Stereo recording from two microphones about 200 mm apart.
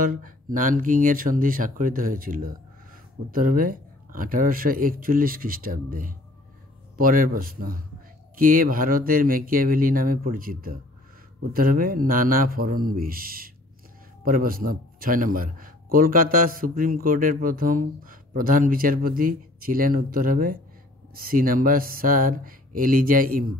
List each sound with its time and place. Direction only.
0.0 s a man's voice: 45° right (ahead or behind)